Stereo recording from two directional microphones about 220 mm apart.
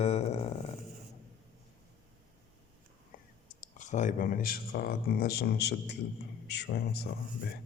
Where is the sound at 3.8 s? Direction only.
35° left (ahead or behind).